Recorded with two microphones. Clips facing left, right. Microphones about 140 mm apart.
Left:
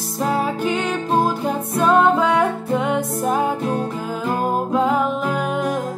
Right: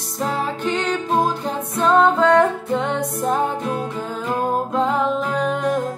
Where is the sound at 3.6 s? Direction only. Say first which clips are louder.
Left 2 dB; 35° left (ahead or behind).